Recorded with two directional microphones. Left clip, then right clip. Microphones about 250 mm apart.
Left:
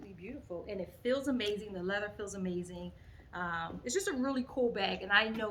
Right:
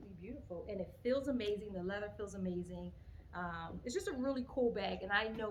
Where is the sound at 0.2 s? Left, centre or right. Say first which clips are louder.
Left 4 dB; centre.